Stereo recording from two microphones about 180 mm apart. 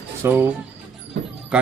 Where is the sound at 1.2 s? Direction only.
90° right.